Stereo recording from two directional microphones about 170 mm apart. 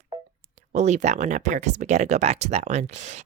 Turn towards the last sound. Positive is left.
turn(degrees=-45)  # may be behind; listen again after turning